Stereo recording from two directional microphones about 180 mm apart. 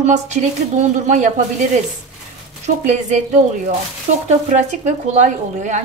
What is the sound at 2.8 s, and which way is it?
Speech, 45° right (ahead or behind).